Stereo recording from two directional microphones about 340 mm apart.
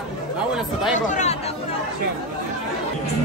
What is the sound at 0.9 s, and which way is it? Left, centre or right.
Chatter, left.